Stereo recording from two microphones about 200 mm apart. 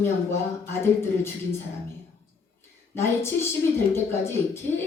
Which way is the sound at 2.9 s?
10° left (ahead or behind).